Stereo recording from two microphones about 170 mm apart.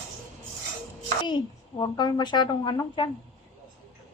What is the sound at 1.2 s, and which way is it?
A woman's voice, 25° left (ahead or behind).